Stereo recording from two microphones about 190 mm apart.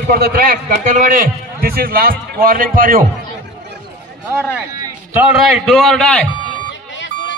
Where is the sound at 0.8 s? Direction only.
45° right (ahead or behind).